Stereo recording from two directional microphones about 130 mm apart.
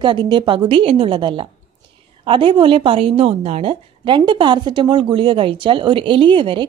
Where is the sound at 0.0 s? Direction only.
35° right (ahead or behind).